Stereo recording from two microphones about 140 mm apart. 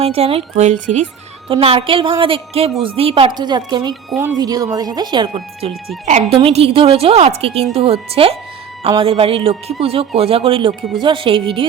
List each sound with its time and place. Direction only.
0.0 s a woman's voice: 45° right (ahead or behind)
1.5 s a woman's voice: 40° right (ahead or behind)
6.1 s speech: 60° right (ahead or behind)
6.4 s a woman's voice: 45° right (ahead or behind)